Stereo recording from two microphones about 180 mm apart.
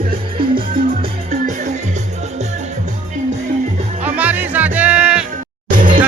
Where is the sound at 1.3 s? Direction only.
45° right (ahead or behind).